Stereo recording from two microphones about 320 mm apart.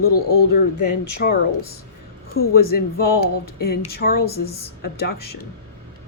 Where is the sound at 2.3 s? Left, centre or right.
Left.